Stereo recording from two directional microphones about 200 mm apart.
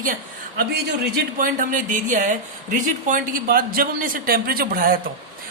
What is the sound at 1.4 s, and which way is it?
Speech, 40° right (ahead or behind).